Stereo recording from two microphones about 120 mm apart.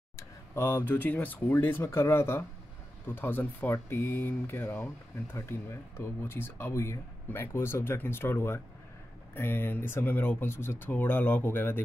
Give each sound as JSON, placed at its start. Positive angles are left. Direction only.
{"t": 0.1, "sound": "speech", "side_deg": 25}